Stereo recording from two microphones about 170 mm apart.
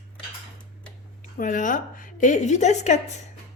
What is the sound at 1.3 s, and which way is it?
Speech, 50° left (ahead or behind).